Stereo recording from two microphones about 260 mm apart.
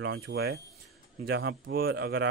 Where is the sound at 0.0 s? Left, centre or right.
Right.